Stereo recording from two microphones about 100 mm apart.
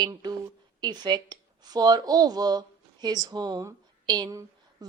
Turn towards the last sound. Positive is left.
turn(degrees=-40)  # may be behind; listen again after turning